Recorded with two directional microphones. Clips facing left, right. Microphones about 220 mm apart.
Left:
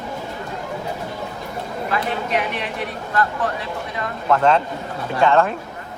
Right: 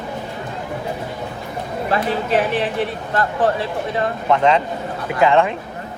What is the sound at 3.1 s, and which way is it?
Speech, 30° right (ahead or behind).